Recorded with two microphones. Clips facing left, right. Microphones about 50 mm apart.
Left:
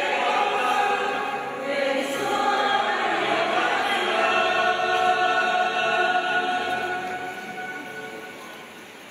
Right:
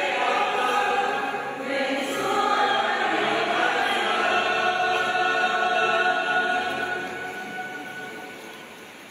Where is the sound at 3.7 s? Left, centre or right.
Left.